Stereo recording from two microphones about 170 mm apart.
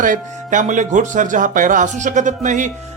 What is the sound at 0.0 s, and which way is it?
Speech, 50° right (ahead or behind).